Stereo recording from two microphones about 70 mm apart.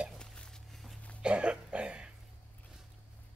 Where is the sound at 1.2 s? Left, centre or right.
Centre.